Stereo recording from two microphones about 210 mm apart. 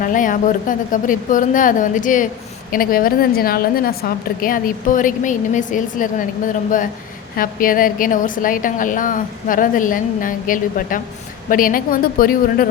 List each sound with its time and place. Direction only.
0.0 s a woman's voice: 40° left (ahead or behind)
7.3 s a woman's voice: 40° left (ahead or behind)